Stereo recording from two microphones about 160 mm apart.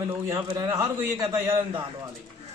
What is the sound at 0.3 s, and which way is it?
A man's voice, 20° right (ahead or behind).